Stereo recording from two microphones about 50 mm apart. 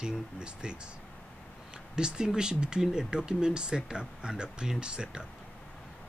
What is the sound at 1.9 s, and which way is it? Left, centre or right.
Speech, centre.